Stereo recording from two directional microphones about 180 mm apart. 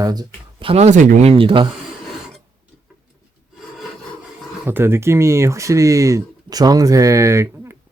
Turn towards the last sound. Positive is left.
turn(degrees=-15)  # may be behind; listen again after turning